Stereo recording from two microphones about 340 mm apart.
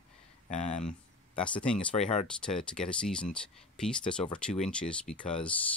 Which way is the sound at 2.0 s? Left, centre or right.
Centre.